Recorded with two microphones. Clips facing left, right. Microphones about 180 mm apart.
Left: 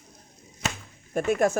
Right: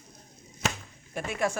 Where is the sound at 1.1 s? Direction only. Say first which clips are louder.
Left 7 dB; 45° left (ahead or behind).